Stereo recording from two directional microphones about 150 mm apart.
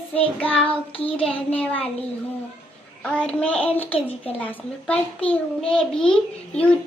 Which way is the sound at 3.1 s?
5° left (ahead or behind).